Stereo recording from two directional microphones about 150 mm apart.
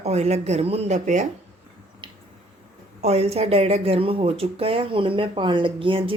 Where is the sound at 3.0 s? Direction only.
45° right (ahead or behind).